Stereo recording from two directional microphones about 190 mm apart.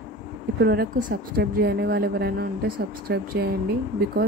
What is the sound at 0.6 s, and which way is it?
Speech, 55° right (ahead or behind).